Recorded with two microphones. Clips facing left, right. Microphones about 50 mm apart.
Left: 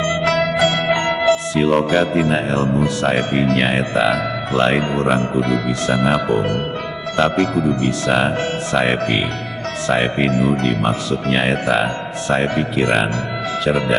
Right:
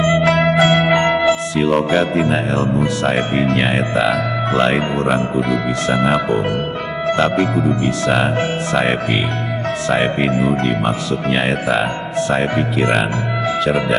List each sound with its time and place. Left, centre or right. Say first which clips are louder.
0.0 s music: right 3 dB; centre
1.5 s speech: even; centre